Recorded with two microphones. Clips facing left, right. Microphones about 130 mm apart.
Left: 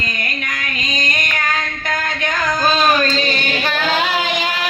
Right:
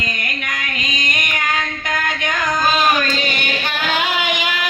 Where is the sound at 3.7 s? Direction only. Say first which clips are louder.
Left 1 dB; 30° left (ahead or behind).